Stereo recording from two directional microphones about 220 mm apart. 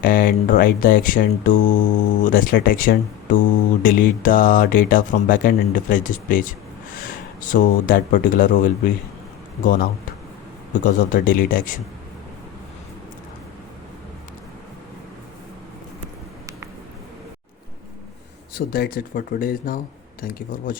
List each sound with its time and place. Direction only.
0.0 s speech: 40° left (ahead or behind)
7.4 s speech: 40° left (ahead or behind)
10.8 s speech: 40° left (ahead or behind)
18.5 s speech: 40° left (ahead or behind)